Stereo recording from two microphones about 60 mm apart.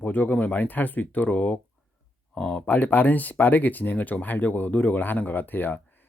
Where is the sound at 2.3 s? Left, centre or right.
Centre.